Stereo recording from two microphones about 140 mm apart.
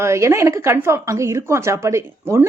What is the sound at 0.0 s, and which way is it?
A woman's voice, 20° right (ahead or behind).